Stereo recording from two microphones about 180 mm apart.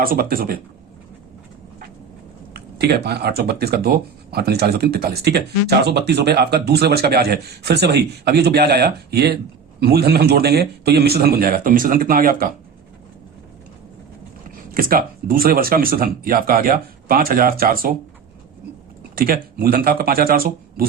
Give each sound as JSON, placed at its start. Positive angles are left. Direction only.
{"t": 0.0, "sound": "speech", "side_deg": -55}
{"t": 2.5, "sound": "speech", "side_deg": -65}
{"t": 14.7, "sound": "speech", "side_deg": -55}
{"t": 19.1, "sound": "speech", "side_deg": -55}